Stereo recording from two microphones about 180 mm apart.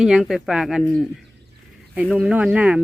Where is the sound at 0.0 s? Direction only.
5° right (ahead or behind).